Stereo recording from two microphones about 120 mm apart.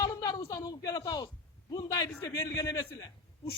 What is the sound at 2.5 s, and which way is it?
Speech, 25° left (ahead or behind).